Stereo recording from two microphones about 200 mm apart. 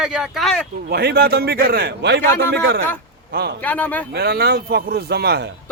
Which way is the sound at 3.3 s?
55° right (ahead or behind).